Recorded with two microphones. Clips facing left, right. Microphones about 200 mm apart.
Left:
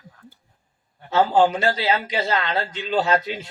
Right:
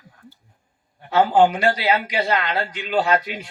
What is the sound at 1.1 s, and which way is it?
A man's voice, 25° left (ahead or behind).